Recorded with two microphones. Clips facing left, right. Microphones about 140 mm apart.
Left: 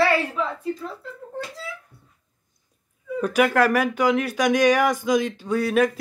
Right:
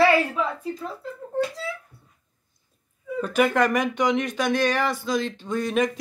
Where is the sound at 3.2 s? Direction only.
10° left (ahead or behind).